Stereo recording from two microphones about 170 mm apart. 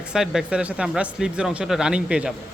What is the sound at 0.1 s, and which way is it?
Speech, 5° right (ahead or behind).